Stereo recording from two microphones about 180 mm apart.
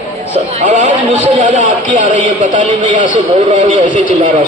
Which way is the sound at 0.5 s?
40° right (ahead or behind).